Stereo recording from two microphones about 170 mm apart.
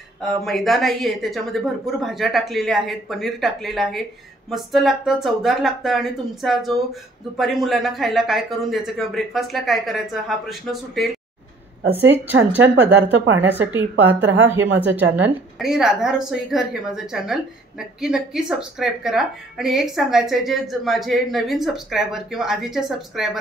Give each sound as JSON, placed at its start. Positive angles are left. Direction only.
{"t": 0.2, "sound": "a woman's voice", "side_deg": 0}
{"t": 12.6, "sound": "speech", "side_deg": -90}
{"t": 14.8, "sound": "a woman's voice", "side_deg": -10}